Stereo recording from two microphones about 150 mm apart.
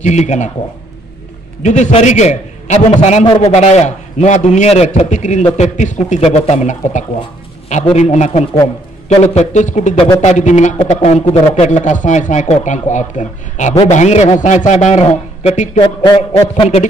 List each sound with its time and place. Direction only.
0.0 s a man's voice: 50° left (ahead or behind)
1.6 s a man's voice: 50° left (ahead or behind)
15.8 s a sound: 30° left (ahead or behind)